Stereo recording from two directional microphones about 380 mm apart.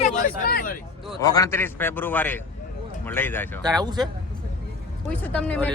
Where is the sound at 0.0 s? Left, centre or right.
Left.